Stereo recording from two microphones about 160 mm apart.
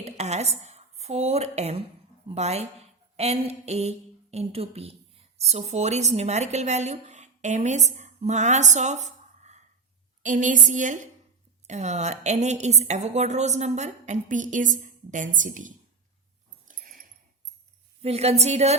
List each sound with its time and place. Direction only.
0.0 s a woman's voice: 45° right (ahead or behind)
16.6 s a sound: 60° right (ahead or behind)
18.0 s speech: 40° right (ahead or behind)